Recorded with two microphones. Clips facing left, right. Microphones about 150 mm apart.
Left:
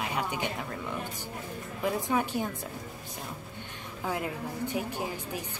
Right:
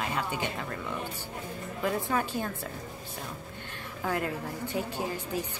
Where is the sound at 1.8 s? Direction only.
15° left (ahead or behind).